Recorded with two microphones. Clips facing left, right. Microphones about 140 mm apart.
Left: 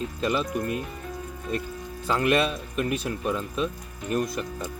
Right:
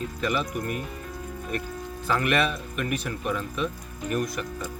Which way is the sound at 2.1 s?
25° left (ahead or behind).